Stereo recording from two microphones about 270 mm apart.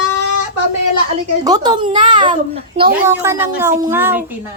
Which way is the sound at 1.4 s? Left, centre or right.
Centre.